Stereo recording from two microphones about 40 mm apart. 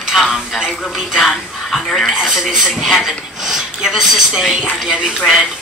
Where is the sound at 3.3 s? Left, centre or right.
Centre.